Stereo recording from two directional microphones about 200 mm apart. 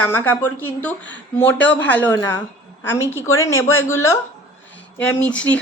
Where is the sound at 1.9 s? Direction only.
10° left (ahead or behind).